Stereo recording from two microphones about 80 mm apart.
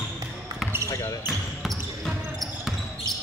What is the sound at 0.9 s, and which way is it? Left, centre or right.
Basketball bounce, left.